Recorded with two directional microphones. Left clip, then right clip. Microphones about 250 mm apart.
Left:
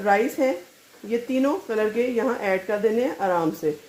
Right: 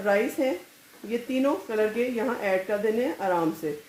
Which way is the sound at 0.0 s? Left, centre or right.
Left.